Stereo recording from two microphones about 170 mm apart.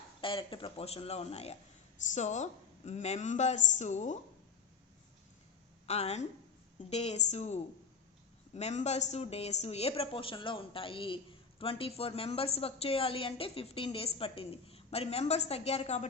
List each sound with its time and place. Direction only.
0.2 s a woman's voice: 30° left (ahead or behind)
5.8 s a woman's voice: 40° left (ahead or behind)